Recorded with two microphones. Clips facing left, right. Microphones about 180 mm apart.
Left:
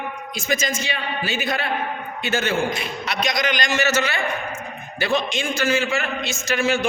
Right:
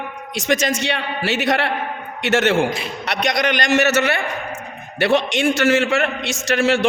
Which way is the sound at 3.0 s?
70° right (ahead or behind).